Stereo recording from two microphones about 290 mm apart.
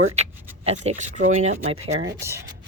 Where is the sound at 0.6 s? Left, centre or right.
Right.